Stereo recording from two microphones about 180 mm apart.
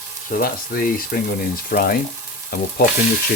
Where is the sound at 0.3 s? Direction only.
50° left (ahead or behind).